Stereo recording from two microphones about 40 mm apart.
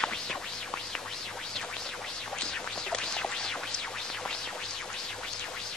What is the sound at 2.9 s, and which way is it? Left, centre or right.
Music, centre.